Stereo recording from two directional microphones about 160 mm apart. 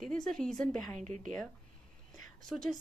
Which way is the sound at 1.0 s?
50° right (ahead or behind).